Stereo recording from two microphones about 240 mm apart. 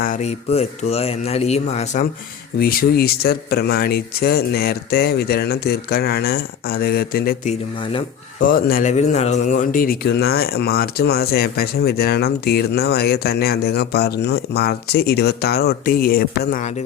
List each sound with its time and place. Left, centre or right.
0.0 s speech: left
2.6 s speech: left